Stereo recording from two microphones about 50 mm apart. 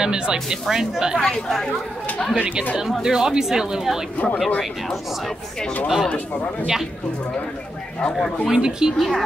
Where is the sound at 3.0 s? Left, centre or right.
Centre.